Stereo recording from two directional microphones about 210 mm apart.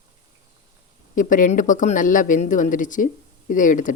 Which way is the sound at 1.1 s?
40° left (ahead or behind).